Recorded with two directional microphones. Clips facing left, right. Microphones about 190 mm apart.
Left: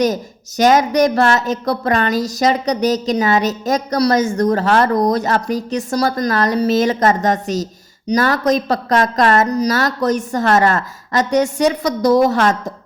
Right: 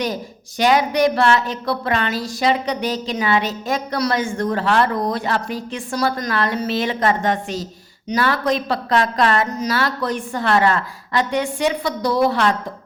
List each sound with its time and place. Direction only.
0.0 s a woman's voice: 45° left (ahead or behind)